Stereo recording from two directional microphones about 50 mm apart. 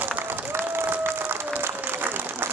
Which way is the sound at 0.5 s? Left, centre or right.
Right.